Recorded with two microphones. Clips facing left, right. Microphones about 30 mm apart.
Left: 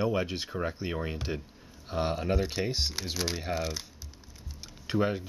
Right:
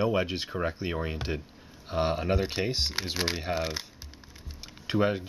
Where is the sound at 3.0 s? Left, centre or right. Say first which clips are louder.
Right 3 dB; right.